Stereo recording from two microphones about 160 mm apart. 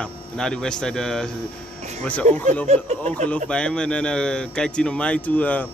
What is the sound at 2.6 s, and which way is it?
Speech, 45° right (ahead or behind).